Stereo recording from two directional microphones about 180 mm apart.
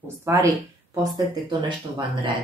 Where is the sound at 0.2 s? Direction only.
15° right (ahead or behind).